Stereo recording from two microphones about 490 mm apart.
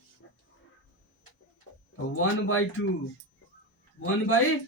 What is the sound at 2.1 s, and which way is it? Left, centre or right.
Speech, left.